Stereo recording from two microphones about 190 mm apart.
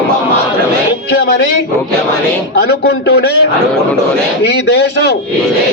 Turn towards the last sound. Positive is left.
turn(degrees=65)  # may be behind; listen again after turning